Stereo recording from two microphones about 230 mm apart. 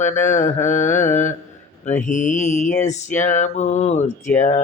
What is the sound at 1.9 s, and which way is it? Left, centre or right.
Speech, left.